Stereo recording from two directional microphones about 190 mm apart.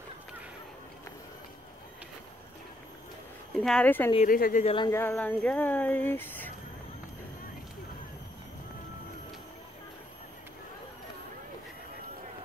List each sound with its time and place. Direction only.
3.6 s speech: 5° left (ahead or behind)
4.3 s speech: 45° left (ahead or behind)
4.6 s speech: 25° left (ahead or behind)
4.9 s speech: 10° left (ahead or behind)